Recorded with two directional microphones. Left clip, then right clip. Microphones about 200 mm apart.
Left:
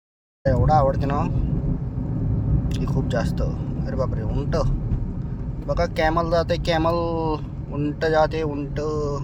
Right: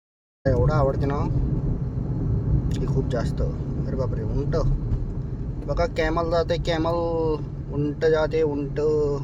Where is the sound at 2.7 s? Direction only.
10° left (ahead or behind).